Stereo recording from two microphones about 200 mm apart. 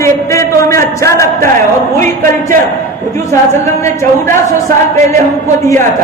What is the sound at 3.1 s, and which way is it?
A man's voice, 15° left (ahead or behind).